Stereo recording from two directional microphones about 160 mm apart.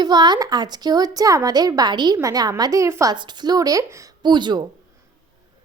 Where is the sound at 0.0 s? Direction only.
25° right (ahead or behind).